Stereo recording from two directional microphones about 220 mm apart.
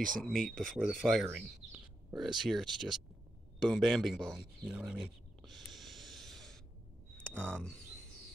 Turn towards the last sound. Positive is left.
turn(degrees=5)  # may be behind; listen again after turning